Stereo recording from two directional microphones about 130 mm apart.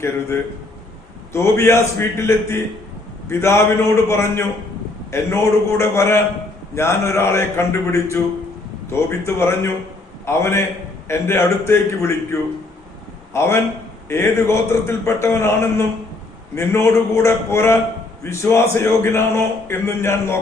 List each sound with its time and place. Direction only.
1.3 s a man's voice: 20° left (ahead or behind)